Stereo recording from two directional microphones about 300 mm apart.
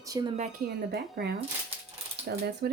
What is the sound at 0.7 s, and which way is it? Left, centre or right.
A woman's voice, right.